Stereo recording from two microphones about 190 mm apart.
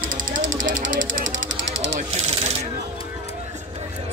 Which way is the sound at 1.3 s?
85° right.